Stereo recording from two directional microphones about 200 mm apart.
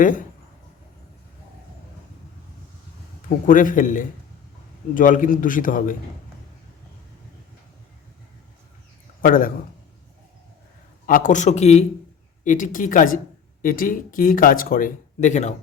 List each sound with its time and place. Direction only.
0.0 s a man's voice: 40° left (ahead or behind)
3.2 s a man's voice: 40° left (ahead or behind)
9.2 s speech: 45° left (ahead or behind)
11.0 s a man's voice: 40° left (ahead or behind)